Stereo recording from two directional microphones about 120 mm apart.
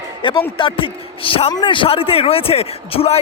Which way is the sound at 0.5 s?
45° left (ahead or behind).